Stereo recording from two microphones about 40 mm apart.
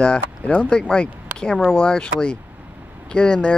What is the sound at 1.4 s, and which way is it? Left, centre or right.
Speech, centre.